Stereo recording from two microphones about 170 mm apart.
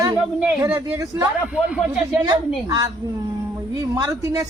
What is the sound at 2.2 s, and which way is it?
Speech, 25° right (ahead or behind).